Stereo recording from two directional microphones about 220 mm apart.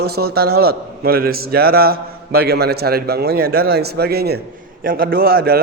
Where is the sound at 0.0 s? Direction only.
45° right (ahead or behind).